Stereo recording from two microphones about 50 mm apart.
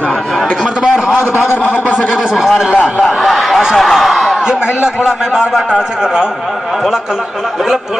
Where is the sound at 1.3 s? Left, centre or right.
Left.